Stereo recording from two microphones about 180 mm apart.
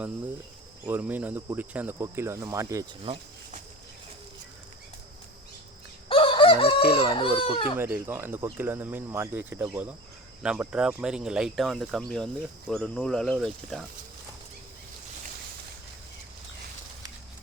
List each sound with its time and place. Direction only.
0.9 s speech: 10° right (ahead or behind)
3.0 s insect: 30° right (ahead or behind)
6.1 s chicken: 30° left (ahead or behind)
7.8 s speech: 10° right (ahead or behind)